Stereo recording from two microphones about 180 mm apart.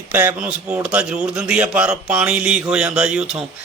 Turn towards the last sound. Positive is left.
turn(degrees=-5)  # may be behind; listen again after turning